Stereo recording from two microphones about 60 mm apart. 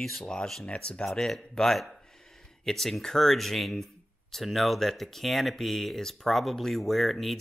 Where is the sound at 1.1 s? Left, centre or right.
Centre.